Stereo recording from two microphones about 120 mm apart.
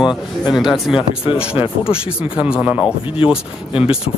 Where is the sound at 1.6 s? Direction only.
45° left (ahead or behind).